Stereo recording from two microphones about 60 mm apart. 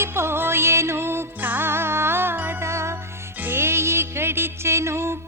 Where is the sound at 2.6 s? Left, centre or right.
Right.